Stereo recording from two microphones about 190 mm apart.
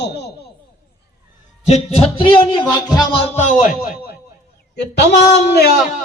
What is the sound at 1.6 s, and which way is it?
Speech, 35° left (ahead or behind).